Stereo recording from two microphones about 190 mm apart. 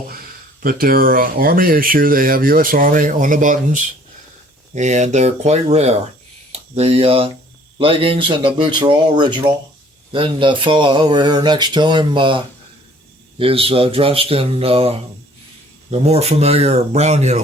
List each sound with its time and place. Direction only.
0.6 s speech: 50° right (ahead or behind)